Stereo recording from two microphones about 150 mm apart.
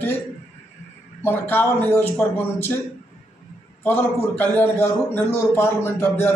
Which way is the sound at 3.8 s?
10° left (ahead or behind).